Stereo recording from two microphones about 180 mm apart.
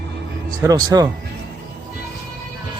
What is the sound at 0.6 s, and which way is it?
Speech, 20° right (ahead or behind).